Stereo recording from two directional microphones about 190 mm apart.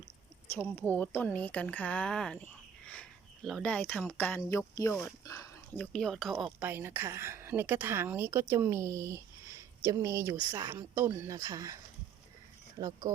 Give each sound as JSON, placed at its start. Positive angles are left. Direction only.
{"t": 0.5, "sound": "speech", "side_deg": 10}